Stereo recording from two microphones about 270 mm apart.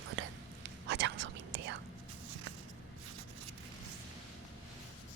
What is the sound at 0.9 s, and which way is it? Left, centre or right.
Whispering, right.